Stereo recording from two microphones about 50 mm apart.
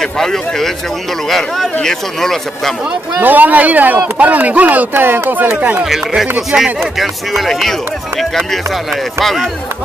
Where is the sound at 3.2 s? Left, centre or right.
Right.